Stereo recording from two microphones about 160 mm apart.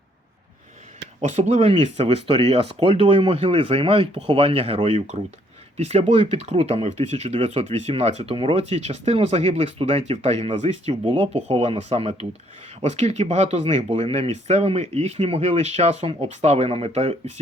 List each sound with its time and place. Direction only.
1.2 s speech: 45° right (ahead or behind)